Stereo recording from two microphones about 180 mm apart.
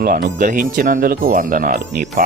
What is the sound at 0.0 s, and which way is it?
Speech, 50° right (ahead or behind).